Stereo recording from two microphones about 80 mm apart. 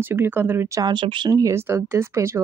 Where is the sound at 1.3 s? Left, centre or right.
Right.